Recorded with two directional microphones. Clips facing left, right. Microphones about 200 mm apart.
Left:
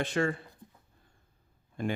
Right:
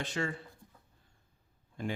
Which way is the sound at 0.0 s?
55° left (ahead or behind).